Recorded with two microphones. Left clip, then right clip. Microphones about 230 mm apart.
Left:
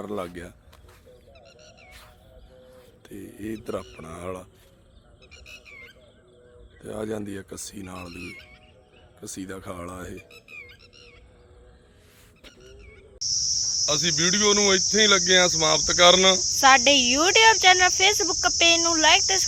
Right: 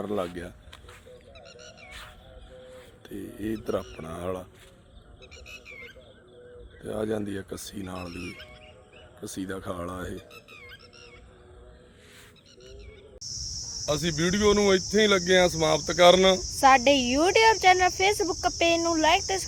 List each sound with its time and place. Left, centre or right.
0.0 s cricket: centre
1.4 s a sound: centre
2.7 s speech: centre
4.0 s cricket: centre
6.8 s cricket: centre
9.2 s cricket: centre
13.8 s speech: centre
16.6 s cricket: centre